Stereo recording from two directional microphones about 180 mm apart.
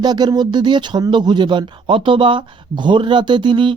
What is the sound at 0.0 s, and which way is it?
Speech, 25° right (ahead or behind).